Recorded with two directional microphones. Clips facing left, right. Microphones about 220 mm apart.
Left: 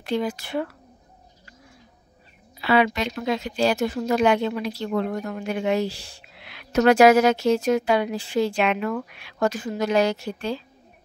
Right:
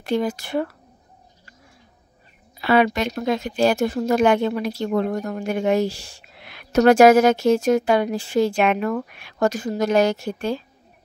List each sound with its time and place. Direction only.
0.0 s speech: 50° right (ahead or behind)
2.6 s speech: 50° right (ahead or behind)